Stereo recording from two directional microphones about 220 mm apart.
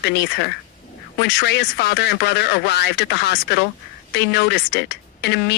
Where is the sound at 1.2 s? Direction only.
50° left (ahead or behind).